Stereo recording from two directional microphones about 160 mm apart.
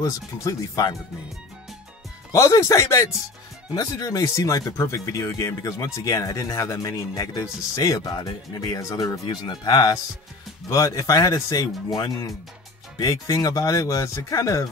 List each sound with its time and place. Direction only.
0.0 s speech: 20° left (ahead or behind)
2.3 s speech: 20° left (ahead or behind)